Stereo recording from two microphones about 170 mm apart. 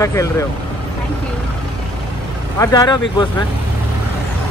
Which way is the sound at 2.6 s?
25° left (ahead or behind).